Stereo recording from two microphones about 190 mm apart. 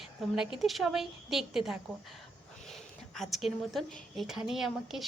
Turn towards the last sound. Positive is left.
turn(degrees=0)  # may be behind; listen again after turning